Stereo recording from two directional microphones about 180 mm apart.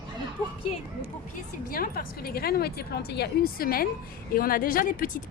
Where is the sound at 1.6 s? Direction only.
55° left (ahead or behind).